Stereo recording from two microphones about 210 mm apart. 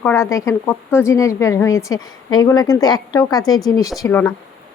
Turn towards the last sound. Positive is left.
turn(degrees=15)  # may be behind; listen again after turning